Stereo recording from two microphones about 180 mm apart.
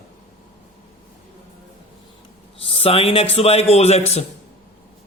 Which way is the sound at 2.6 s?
30° left (ahead or behind).